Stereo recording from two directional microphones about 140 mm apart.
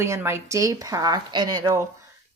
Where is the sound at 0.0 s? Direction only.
20° right (ahead or behind).